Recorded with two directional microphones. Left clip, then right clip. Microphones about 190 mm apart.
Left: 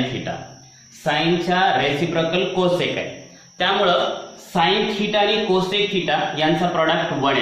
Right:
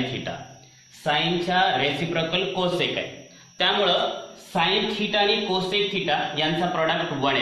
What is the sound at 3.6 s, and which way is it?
Speech, 35° right (ahead or behind).